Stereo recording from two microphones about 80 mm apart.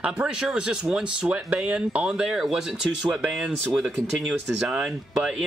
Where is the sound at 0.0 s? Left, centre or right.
Centre.